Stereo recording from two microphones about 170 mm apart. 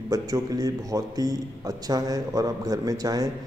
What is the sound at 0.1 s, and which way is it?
A man's voice, 20° right (ahead or behind).